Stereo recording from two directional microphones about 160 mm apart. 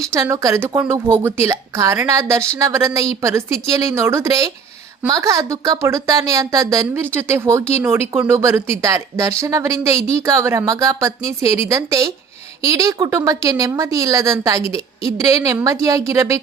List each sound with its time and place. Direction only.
0.0 s a woman's voice: 20° right (ahead or behind)